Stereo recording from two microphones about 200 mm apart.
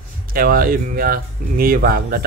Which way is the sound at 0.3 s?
45° right (ahead or behind).